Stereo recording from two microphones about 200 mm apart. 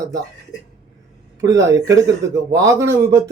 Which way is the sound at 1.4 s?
15° right (ahead or behind).